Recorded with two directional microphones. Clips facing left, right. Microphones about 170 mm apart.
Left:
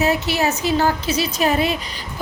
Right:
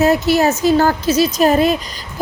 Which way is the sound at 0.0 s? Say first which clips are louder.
Right 6 dB; 40° right (ahead or behind).